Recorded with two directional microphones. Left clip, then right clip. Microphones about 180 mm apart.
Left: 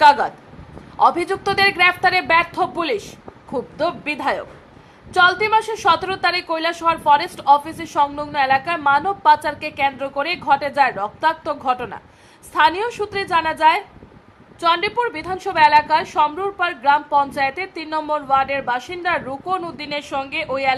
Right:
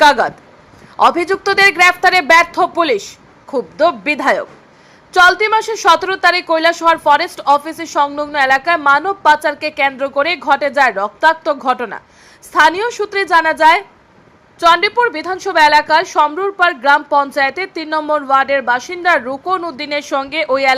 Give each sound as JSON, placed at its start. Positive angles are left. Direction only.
{"t": 0.0, "sound": "a woman's voice", "side_deg": -20}